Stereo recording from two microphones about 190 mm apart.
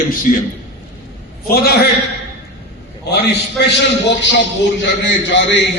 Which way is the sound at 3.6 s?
65° left (ahead or behind).